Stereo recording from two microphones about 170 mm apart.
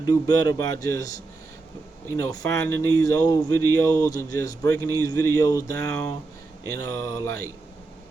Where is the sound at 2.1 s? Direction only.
20° left (ahead or behind).